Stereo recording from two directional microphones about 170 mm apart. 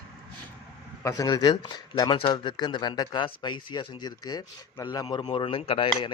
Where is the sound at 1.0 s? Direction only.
20° left (ahead or behind).